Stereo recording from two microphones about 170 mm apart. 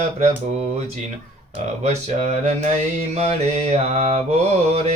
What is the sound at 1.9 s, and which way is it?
Mantra, 40° right (ahead or behind).